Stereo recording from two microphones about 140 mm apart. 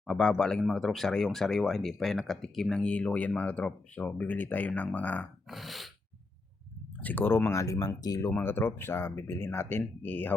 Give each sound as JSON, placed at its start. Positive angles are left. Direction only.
{"t": 0.0, "sound": "speech", "side_deg": 5}
{"t": 5.5, "sound": "speech", "side_deg": 0}
{"t": 6.9, "sound": "speech", "side_deg": 10}
{"t": 8.3, "sound": "speech", "side_deg": 15}